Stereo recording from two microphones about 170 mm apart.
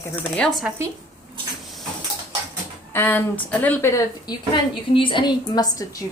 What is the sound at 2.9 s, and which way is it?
A woman's voice, 10° left (ahead or behind).